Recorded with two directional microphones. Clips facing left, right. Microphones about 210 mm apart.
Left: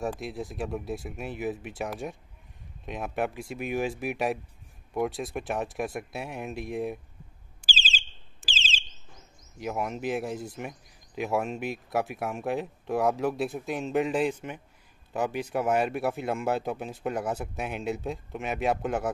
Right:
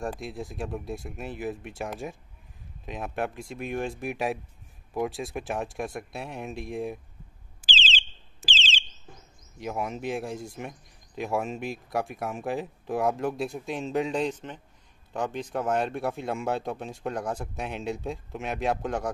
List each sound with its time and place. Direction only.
0.2 s speech: centre (ahead or behind)
7.6 s alarm: 20° right (ahead or behind)
9.6 s speech: centre (ahead or behind)